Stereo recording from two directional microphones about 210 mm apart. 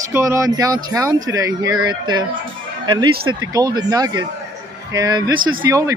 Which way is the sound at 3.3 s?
20° right (ahead or behind).